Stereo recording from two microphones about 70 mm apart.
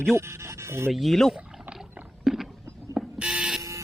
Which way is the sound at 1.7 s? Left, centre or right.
Right.